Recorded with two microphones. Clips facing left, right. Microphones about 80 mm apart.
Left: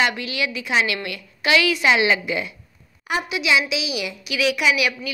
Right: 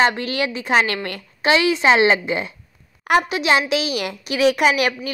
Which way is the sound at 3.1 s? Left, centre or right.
Right.